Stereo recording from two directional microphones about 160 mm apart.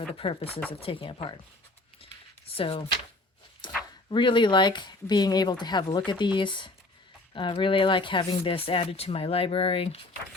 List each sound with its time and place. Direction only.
0.1 s speech: 35° left (ahead or behind)
2.5 s speech: 35° left (ahead or behind)
3.6 s dog: 30° left (ahead or behind)
4.1 s speech: 30° left (ahead or behind)